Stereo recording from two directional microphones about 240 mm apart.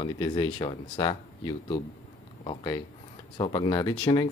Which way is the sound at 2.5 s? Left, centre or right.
Centre.